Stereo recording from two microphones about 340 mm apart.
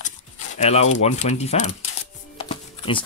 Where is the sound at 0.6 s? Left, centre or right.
Centre.